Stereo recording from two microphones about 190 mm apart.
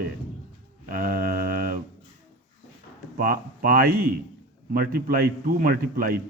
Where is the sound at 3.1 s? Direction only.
50° right (ahead or behind).